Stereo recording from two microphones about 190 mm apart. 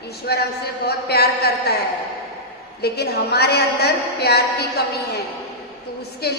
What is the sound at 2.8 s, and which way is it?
A woman's voice, 60° left (ahead or behind).